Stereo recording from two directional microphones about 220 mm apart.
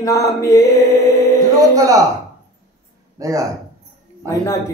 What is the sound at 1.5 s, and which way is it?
Speech, 15° right (ahead or behind).